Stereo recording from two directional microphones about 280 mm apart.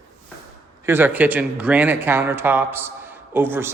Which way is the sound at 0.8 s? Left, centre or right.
Centre.